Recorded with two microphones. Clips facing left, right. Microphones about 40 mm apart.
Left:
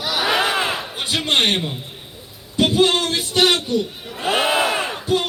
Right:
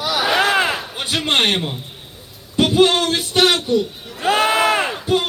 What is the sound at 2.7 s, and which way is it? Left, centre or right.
A man's voice, right.